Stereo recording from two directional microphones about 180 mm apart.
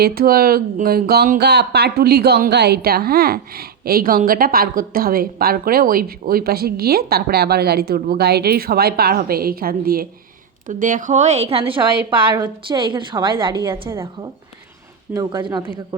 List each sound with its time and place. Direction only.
0.0 s a woman's voice: 55° right (ahead or behind); by 16.0 s 25° right (ahead or behind)